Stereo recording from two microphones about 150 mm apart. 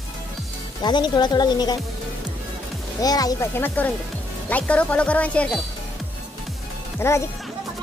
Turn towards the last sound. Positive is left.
turn(degrees=15)  # may be behind; listen again after turning